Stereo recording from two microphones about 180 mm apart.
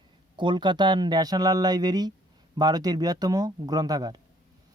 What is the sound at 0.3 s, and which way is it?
Speech, 25° right (ahead or behind).